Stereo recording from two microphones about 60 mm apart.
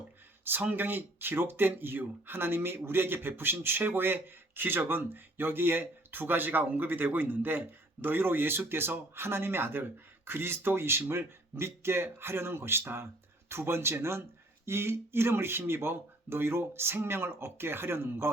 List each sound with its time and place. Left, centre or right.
0.7 s speech: right